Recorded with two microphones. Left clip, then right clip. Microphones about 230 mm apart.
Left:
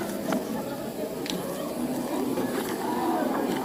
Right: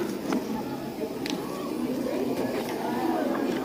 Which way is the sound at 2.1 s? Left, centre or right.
Left.